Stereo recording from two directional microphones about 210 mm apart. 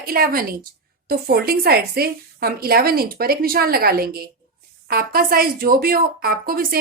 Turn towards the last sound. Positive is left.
turn(degrees=-45)  # may be behind; listen again after turning